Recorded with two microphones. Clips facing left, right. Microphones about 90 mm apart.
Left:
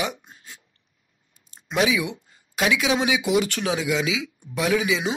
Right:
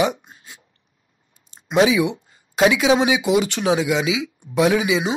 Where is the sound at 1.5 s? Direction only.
25° right (ahead or behind).